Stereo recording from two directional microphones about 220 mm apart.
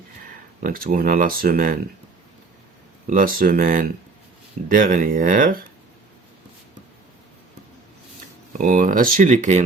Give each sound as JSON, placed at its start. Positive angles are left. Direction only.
{"t": 0.6, "sound": "speech", "side_deg": -40}
{"t": 3.1, "sound": "speech", "side_deg": -40}
{"t": 8.5, "sound": "speech", "side_deg": -35}